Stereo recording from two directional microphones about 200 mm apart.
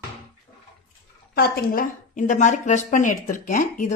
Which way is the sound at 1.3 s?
50° left (ahead or behind).